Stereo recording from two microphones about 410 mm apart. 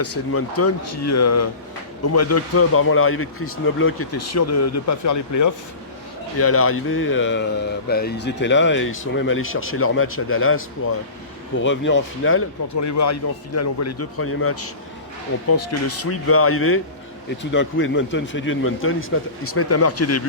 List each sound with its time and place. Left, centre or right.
0.0 s speech: left
6.4 s speech: left
12.8 s speech: left